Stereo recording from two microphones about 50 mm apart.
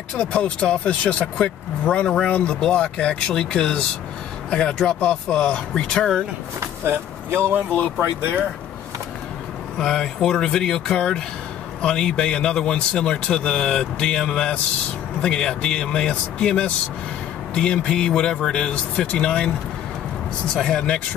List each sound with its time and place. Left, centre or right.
0.2 s speech: left
6.6 s speech: right
9.8 s speech: centre
20.5 s speech: centre